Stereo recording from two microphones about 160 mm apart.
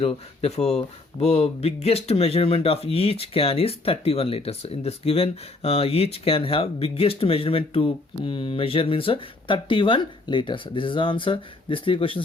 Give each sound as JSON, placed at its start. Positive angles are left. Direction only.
{"t": 0.0, "sound": "speech", "side_deg": 40}